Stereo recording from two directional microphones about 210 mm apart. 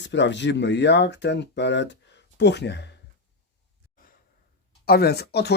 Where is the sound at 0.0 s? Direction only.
55° left (ahead or behind).